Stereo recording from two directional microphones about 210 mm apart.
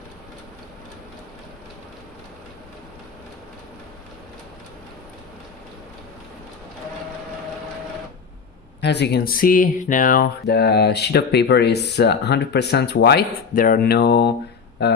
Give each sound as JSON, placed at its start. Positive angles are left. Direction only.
{"t": 8.8, "sound": "speech", "side_deg": 55}